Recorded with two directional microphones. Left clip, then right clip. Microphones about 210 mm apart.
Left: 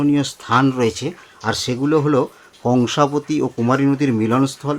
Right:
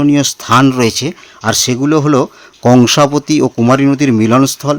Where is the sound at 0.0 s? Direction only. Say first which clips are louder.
Right 7 dB; 50° right (ahead or behind).